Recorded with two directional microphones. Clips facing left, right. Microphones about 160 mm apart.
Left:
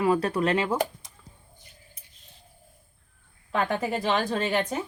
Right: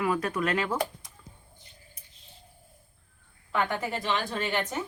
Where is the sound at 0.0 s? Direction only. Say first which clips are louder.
Left 4 dB; 30° left (ahead or behind).